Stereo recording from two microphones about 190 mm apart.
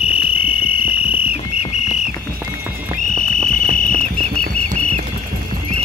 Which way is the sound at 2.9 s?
40° right (ahead or behind).